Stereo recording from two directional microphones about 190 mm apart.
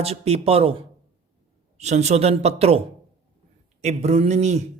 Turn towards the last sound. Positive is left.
turn(degrees=-35)  # may be behind; listen again after turning